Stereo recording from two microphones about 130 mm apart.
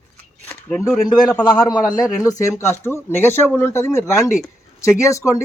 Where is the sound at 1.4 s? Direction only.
35° left (ahead or behind).